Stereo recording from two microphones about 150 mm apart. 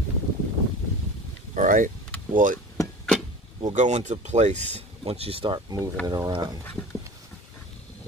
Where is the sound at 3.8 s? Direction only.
50° right (ahead or behind); by 6.5 s 30° right (ahead or behind).